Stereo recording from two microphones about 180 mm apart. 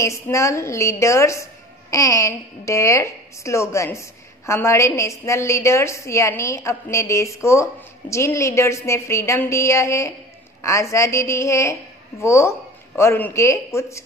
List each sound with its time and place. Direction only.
0.0 s a woman's voice: 15° left (ahead or behind)